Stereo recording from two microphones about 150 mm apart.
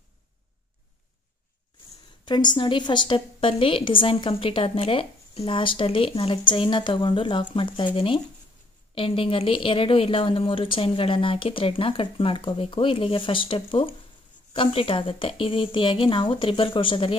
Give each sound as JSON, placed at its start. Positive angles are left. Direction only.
{"t": 2.2, "sound": "a woman's voice", "side_deg": 30}